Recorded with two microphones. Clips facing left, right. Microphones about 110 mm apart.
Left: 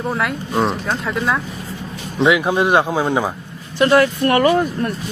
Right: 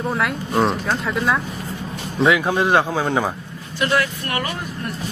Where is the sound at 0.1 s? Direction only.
Centre (ahead or behind).